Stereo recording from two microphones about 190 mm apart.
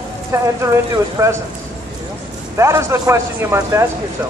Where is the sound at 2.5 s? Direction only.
15° right (ahead or behind).